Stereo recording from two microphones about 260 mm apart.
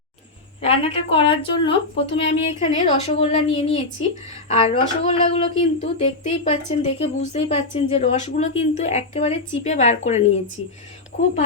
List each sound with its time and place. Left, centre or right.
0.6 s speech: left